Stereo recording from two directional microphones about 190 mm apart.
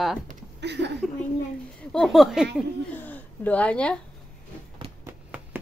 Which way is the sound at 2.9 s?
10° left (ahead or behind).